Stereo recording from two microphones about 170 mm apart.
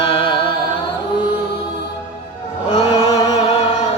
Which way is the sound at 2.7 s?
30° left (ahead or behind).